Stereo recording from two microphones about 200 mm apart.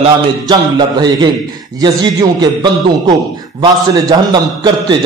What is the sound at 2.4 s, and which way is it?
A man's voice, 20° right (ahead or behind).